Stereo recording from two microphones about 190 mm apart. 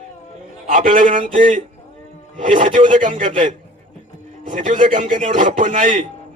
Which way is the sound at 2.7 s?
45° right (ahead or behind).